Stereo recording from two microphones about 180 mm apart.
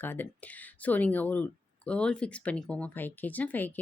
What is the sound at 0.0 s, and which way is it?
Speech, 10° left (ahead or behind).